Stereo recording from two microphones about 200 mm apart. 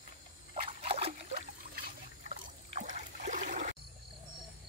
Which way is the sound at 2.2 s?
40° right (ahead or behind).